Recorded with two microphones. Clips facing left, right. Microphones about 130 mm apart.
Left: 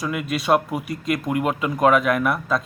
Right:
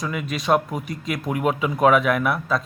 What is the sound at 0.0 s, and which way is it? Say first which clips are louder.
Speech: left 2 dB; 5° left (ahead or behind).